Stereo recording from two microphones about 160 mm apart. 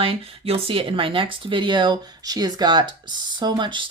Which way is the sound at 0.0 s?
35° right (ahead or behind).